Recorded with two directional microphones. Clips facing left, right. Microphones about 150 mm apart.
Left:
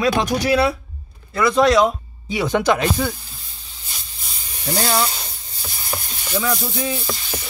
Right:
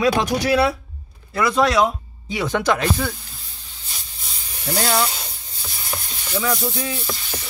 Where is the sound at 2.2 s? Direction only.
15° left (ahead or behind).